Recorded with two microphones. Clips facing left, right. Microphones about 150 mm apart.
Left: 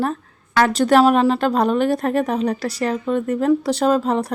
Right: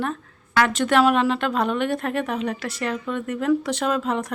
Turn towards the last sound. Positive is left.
turn(degrees=35)  # may be behind; listen again after turning